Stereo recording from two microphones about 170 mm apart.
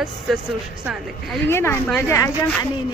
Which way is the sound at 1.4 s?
15° left (ahead or behind).